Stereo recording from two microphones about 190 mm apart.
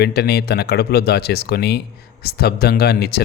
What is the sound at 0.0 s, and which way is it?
Speech, 55° left (ahead or behind).